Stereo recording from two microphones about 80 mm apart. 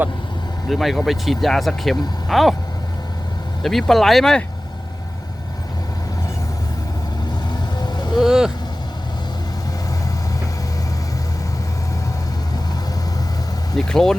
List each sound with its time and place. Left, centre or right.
0.7 s speech: centre
3.6 s speech: centre
7.8 s vehicle: left
8.1 s speech: centre
13.7 s speech: centre